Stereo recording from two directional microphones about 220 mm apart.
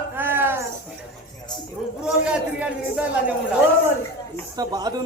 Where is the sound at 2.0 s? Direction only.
5° right (ahead or behind).